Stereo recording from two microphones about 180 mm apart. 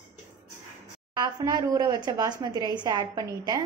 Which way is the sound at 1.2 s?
20° right (ahead or behind).